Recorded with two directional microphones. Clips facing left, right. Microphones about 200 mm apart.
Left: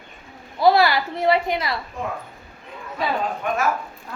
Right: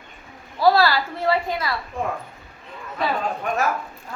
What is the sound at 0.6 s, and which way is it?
A woman's voice, 20° left (ahead or behind).